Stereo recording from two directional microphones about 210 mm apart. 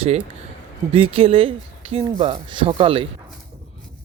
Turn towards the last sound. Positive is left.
turn(degrees=-25)  # may be behind; listen again after turning